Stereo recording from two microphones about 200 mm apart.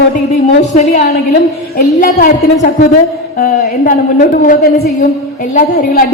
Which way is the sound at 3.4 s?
45° left (ahead or behind).